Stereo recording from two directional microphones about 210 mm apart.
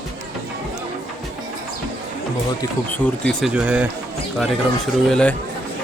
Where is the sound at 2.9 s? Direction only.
5° left (ahead or behind).